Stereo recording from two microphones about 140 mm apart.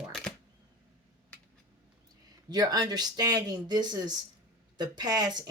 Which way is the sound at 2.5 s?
30° right (ahead or behind).